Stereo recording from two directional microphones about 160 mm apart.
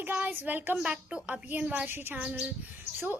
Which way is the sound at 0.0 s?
10° right (ahead or behind).